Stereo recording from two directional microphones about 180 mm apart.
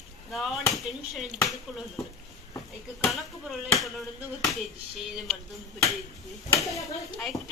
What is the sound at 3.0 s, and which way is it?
Speech, centre (ahead or behind).